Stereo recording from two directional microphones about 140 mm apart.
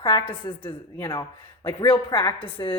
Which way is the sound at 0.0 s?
35° left (ahead or behind).